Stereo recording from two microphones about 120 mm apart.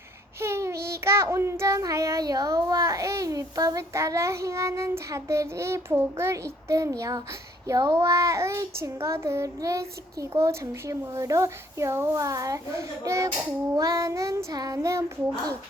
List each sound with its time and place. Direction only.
0.3 s child singing: 20° right (ahead or behind)